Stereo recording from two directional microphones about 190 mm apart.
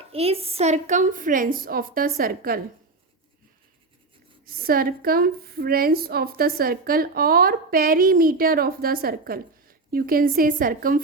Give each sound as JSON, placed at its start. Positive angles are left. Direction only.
{"t": 0.1, "sound": "a woman's voice", "side_deg": -30}
{"t": 4.4, "sound": "a woman's voice", "side_deg": -50}